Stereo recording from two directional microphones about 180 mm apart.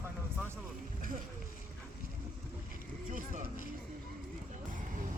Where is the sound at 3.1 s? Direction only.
45° right (ahead or behind).